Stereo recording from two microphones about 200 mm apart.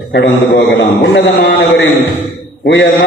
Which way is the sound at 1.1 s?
60° left (ahead or behind).